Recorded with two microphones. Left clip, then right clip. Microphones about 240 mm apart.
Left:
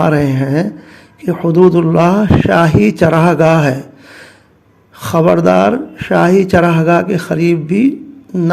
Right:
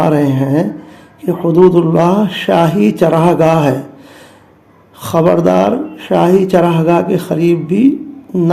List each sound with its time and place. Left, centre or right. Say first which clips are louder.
0.0 s speech: right 1 dB; left
4.9 s speech: even; left